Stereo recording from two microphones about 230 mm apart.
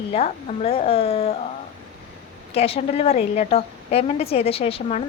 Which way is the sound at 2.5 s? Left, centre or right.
Left.